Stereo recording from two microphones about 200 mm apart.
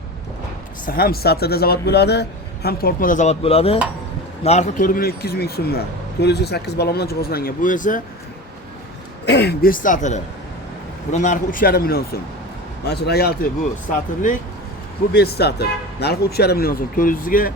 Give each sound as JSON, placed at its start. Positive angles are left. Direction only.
{"t": 0.9, "sound": "speech", "side_deg": 50}
{"t": 9.2, "sound": "a man's voice", "side_deg": 60}
{"t": 15.1, "sound": "speech", "side_deg": 55}